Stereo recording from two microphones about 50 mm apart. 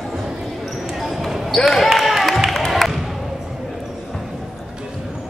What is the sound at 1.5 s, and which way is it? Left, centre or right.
Speech, centre.